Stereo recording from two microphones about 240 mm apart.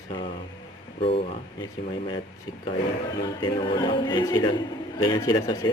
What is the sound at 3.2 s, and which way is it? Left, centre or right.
A man's voice, centre.